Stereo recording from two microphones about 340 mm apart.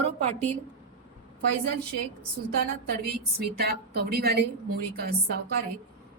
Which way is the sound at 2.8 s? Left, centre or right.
Right.